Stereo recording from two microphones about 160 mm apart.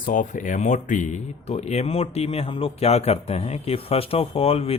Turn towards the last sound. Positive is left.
turn(degrees=40)  # may be behind; listen again after turning